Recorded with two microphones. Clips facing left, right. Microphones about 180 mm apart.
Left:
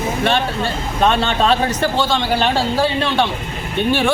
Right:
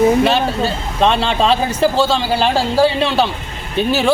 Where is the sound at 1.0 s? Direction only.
25° right (ahead or behind).